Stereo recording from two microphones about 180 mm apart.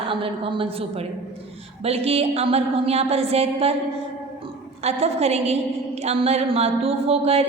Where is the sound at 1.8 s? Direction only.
35° right (ahead or behind).